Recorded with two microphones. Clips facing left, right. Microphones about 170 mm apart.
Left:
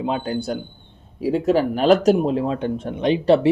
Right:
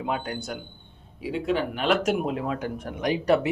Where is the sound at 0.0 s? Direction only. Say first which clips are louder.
Left 6 dB; 25° left (ahead or behind).